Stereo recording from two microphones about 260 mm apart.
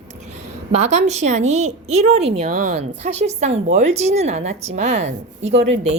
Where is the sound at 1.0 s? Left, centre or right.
Right.